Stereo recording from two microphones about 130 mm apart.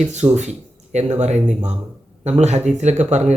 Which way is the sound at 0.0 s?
60° right (ahead or behind).